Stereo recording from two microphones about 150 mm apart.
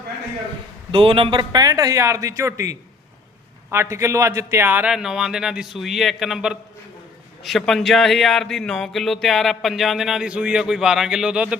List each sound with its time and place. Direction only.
0.9 s a man's voice: 35° right (ahead or behind); by 11.5 s 5° right (ahead or behind)